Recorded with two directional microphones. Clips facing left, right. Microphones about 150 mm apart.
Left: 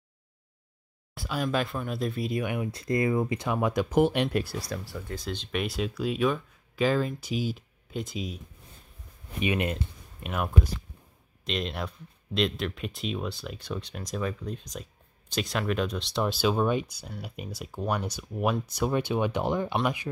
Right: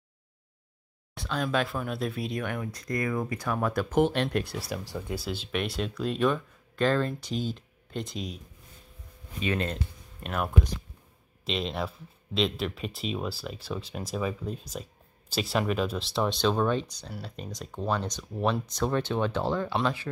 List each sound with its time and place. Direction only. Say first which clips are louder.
1.1 s speech: even; 5° left (ahead or behind)
2.4 s speech: left 2 dB; 10° left (ahead or behind)
2.7 s speech: left 6 dB; 25° left (ahead or behind); by 4.6 s 5° left (ahead or behind)
5.1 s speech: even; 5° right (ahead or behind)
9.4 s speech: left 2 dB; 15° left (ahead or behind)
10.2 s speech: even; 5° left (ahead or behind)